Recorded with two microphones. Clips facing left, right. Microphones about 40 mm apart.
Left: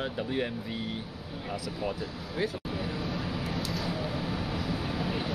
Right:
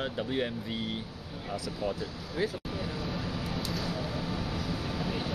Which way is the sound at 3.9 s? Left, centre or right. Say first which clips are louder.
Left 2 dB; centre.